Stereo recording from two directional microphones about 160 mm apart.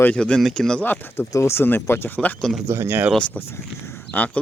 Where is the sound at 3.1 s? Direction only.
10° left (ahead or behind).